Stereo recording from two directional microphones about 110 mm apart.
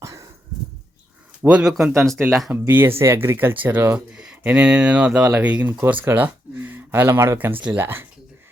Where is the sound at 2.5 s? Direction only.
20° right (ahead or behind).